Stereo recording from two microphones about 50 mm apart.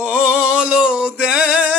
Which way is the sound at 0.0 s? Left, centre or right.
Centre.